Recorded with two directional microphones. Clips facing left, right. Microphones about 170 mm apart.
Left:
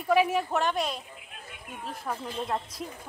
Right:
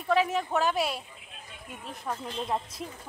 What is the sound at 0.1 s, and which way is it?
Speech, 10° left (ahead or behind).